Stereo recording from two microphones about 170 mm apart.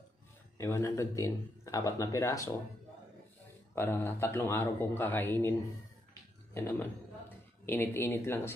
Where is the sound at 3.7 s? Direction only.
15° left (ahead or behind).